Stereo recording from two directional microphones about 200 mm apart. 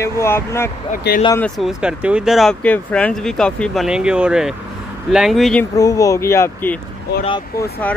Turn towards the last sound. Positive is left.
turn(degrees=10)  # may be behind; listen again after turning